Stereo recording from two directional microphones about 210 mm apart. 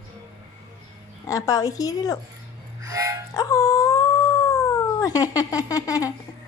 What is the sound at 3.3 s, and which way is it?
Dog, 15° left (ahead or behind).